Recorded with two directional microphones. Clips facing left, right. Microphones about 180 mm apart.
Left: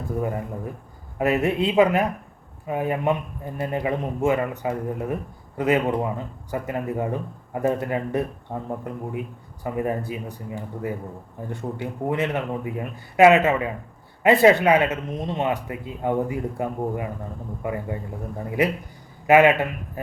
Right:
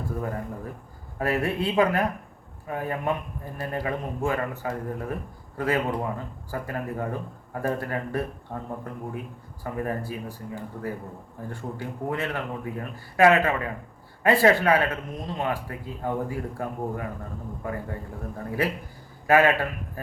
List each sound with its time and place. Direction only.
0.2 s speech: 15° left (ahead or behind)